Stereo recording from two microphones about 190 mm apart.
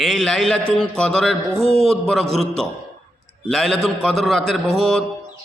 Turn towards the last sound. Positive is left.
turn(degrees=0)  # may be behind; listen again after turning